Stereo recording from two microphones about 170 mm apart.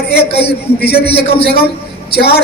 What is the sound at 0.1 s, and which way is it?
Speech, 70° left (ahead or behind).